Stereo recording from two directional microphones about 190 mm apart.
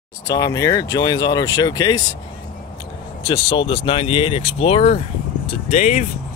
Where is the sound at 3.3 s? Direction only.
25° left (ahead or behind).